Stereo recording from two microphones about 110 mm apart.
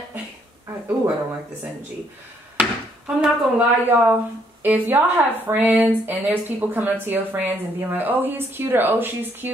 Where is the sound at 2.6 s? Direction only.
10° right (ahead or behind).